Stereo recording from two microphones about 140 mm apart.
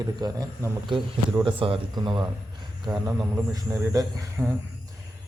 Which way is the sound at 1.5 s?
40° right (ahead or behind).